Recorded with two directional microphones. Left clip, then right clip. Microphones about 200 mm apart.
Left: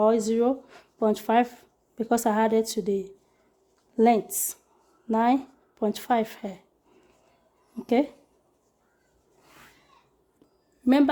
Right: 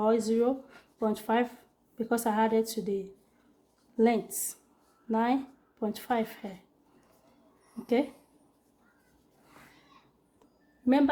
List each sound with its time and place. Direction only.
0.0 s speech: 40° left (ahead or behind)
10.8 s speech: 60° left (ahead or behind)